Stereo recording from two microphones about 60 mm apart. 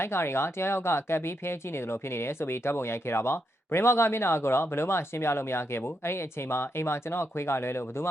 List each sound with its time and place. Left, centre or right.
0.0 s speech: left